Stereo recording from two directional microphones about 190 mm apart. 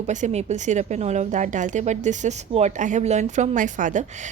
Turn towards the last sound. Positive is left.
turn(degrees=-40)  # may be behind; listen again after turning